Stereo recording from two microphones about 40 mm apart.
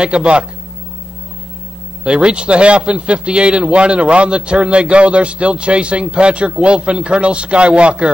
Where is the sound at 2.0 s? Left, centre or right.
Right.